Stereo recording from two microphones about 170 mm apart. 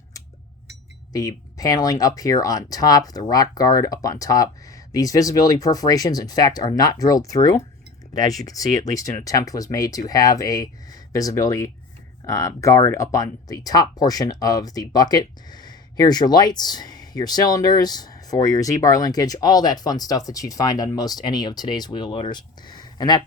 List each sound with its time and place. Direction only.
1.1 s speech: 20° left (ahead or behind)